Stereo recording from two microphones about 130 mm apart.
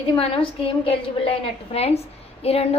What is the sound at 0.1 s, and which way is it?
A woman's voice, 45° left (ahead or behind).